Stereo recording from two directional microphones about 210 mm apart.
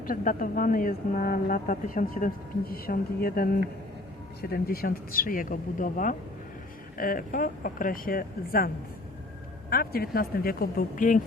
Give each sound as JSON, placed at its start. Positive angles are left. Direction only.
{"t": 0.0, "sound": "a woman's voice", "side_deg": 40}